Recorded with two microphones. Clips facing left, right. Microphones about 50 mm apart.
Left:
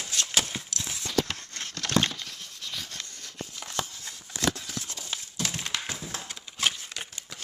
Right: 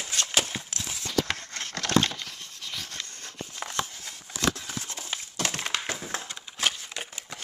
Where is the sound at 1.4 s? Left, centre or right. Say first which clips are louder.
Right 2 dB; right.